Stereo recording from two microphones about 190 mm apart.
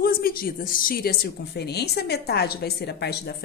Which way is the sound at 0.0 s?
50° left (ahead or behind).